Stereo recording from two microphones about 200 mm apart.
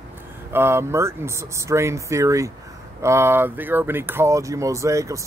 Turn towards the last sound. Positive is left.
turn(degrees=-15)  # may be behind; listen again after turning